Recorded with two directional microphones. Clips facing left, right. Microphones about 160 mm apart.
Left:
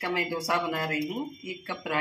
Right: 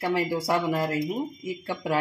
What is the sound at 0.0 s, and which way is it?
Speech, 30° right (ahead or behind).